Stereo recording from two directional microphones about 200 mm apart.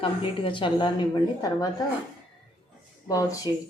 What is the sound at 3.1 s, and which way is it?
Speech, 15° left (ahead or behind).